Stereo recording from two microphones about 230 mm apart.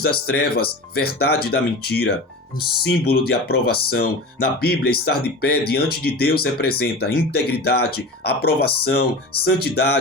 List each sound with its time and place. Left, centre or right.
0.0 s speech: left
3.1 s speech: left